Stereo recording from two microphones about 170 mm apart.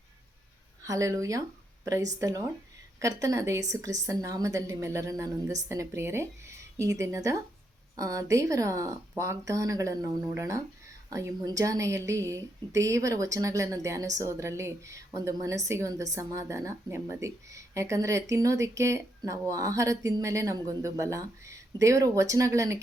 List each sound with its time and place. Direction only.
0.8 s a woman's voice: 20° right (ahead or behind)